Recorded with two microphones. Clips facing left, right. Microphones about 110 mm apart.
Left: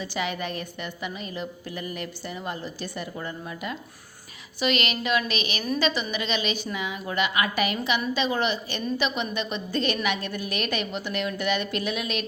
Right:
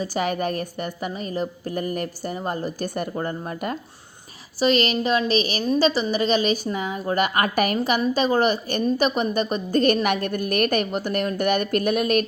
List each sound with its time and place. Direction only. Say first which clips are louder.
0.0 s a woman's voice: right 6 dB; 45° right (ahead or behind)
4.6 s a woman's voice: right 6 dB; 35° right (ahead or behind)